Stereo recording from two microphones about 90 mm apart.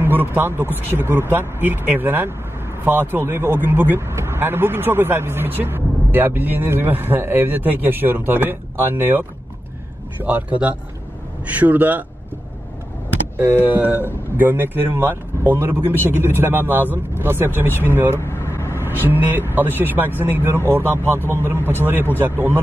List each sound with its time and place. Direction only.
0.0 s speech: 20° right (ahead or behind)
10.2 s speech: 20° right (ahead or behind)
13.4 s speech: 25° right (ahead or behind)
18.2 s vehicle: 30° left (ahead or behind)
18.7 s speech: 25° right (ahead or behind)